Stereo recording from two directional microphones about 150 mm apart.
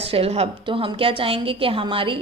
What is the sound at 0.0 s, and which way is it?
A woman's voice, 40° right (ahead or behind).